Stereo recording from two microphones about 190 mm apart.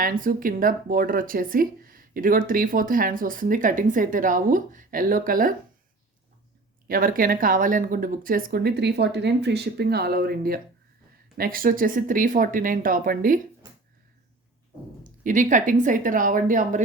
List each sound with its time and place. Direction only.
0.0 s speech: 45° right (ahead or behind)
6.8 s speech: 50° right (ahead or behind)
15.2 s speech: 45° right (ahead or behind)